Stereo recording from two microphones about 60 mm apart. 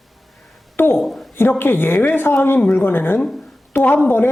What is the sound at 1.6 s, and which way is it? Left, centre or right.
A woman's voice, left.